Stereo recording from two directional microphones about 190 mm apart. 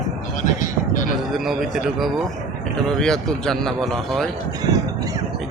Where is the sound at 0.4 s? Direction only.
40° left (ahead or behind).